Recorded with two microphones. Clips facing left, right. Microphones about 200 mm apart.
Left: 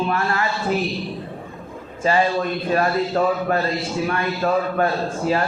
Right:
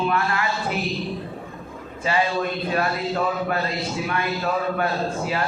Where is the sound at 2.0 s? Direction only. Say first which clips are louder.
Left 4 dB; 45° left (ahead or behind).